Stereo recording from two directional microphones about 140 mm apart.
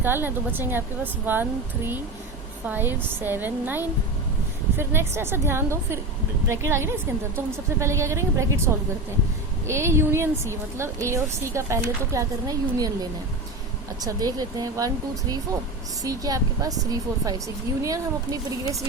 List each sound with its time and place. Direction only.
0.0 s a woman's voice: 15° right (ahead or behind)